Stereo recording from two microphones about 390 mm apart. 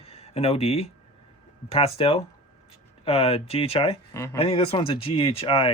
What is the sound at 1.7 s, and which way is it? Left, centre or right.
Speech, centre.